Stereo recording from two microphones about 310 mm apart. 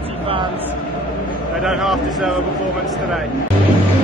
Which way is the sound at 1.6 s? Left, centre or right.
Centre.